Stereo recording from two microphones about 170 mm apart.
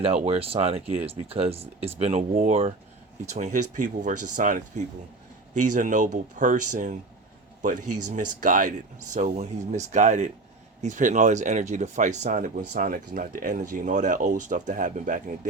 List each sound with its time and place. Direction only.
0.0 s speech: 35° right (ahead or behind)
2.3 s speech: 50° right (ahead or behind)